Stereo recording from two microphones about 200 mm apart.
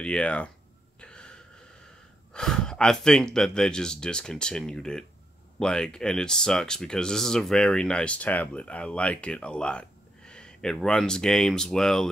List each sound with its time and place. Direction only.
0.0 s speech: 5° left (ahead or behind)
1.0 s a sound: 5° left (ahead or behind)
2.3 s speech: 5° left (ahead or behind)